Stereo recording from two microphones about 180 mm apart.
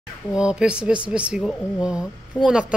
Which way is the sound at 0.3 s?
5° right (ahead or behind).